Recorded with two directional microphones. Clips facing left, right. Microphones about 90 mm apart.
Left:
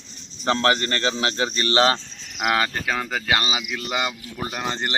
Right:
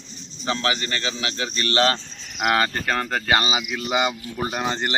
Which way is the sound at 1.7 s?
20° left (ahead or behind).